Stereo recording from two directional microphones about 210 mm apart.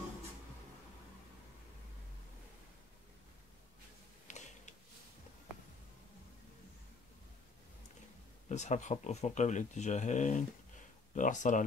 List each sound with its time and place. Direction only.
8.5 s speech: 35° left (ahead or behind)